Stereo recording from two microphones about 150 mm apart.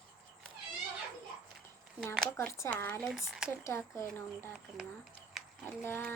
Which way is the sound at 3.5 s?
15° left (ahead or behind).